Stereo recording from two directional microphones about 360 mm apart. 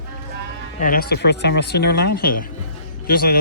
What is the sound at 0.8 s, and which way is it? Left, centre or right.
Speech, left.